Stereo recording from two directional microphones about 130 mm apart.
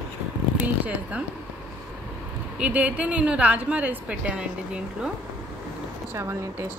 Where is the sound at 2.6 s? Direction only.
10° right (ahead or behind).